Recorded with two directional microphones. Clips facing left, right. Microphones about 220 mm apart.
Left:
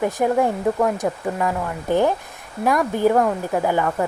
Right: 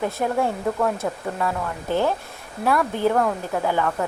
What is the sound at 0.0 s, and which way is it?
Speech, 15° left (ahead or behind).